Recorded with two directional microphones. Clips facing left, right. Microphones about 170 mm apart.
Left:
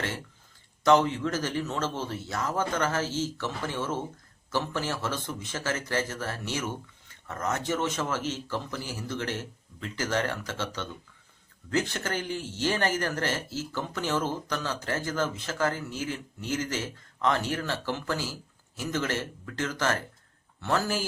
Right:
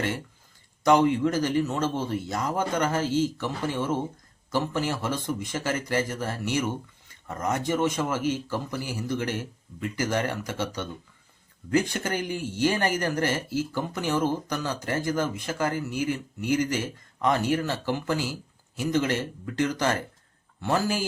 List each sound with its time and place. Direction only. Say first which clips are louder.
0.9 s speech: right 2 dB; 15° right (ahead or behind)